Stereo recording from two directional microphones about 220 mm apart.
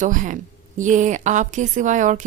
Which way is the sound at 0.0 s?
35° right (ahead or behind).